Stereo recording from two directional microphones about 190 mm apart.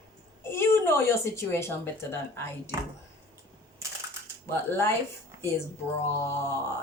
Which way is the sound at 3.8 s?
15° right (ahead or behind).